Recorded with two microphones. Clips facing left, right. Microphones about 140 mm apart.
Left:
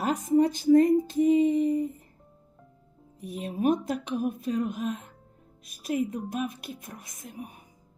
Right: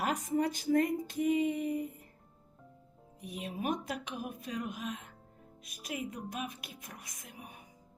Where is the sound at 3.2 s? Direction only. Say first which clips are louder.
Left 10 dB; 35° left (ahead or behind).